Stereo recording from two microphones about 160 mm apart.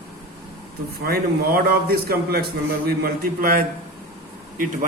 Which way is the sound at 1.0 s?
70° right (ahead or behind).